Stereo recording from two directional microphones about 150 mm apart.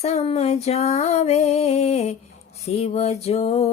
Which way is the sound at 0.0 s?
45° left (ahead or behind).